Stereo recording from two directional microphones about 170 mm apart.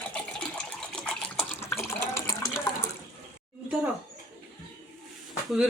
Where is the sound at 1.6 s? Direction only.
15° left (ahead or behind).